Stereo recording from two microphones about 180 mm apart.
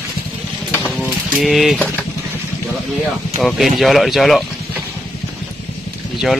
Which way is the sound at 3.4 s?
Centre (ahead or behind).